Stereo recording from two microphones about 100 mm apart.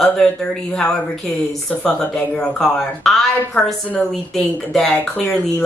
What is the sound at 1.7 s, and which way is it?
A woman's voice, 5° left (ahead or behind).